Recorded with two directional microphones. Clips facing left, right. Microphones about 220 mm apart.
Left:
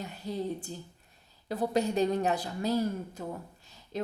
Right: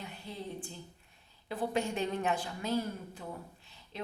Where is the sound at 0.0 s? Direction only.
40° left (ahead or behind).